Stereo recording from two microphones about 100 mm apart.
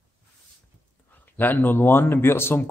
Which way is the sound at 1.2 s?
20° left (ahead or behind).